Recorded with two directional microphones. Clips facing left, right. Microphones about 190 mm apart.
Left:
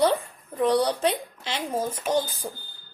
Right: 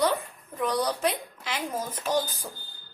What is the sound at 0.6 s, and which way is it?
A woman's voice, 30° left (ahead or behind).